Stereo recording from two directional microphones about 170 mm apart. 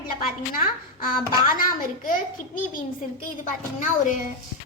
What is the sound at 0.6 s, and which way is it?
A child's voice, 55° left (ahead or behind).